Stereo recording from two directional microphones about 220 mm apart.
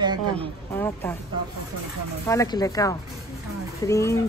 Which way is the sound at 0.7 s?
10° left (ahead or behind).